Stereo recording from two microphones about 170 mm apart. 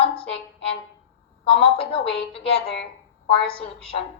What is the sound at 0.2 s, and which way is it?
A woman's voice, 35° left (ahead or behind).